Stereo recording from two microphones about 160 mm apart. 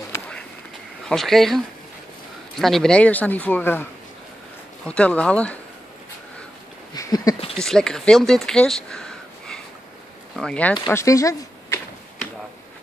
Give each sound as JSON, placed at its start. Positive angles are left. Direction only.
{"t": 0.1, "sound": "a sound", "side_deg": 5}
{"t": 1.0, "sound": "speech", "side_deg": 5}
{"t": 2.6, "sound": "speech", "side_deg": 0}
{"t": 4.8, "sound": "speech", "side_deg": 5}
{"t": 6.9, "sound": "a sound", "side_deg": 20}
{"t": 7.6, "sound": "speech", "side_deg": 5}
{"t": 10.9, "sound": "speech", "side_deg": 20}